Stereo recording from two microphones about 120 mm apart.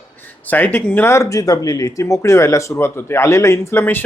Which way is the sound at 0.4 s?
15° left (ahead or behind).